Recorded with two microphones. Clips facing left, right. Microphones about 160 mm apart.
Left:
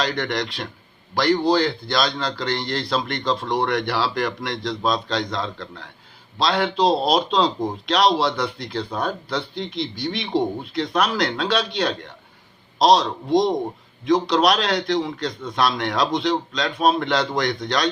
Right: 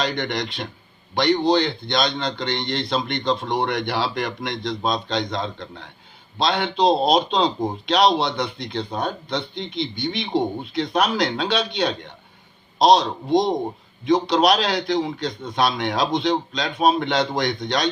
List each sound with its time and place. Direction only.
0.0 s speech: centre (ahead or behind)
8.8 s speech: 25° right (ahead or behind)
9.3 s speech: centre (ahead or behind)